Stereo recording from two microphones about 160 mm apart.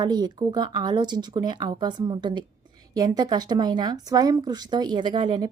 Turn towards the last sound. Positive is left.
turn(degrees=-25)  # may be behind; listen again after turning